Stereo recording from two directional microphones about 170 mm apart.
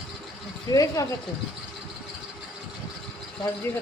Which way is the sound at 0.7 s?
20° left (ahead or behind).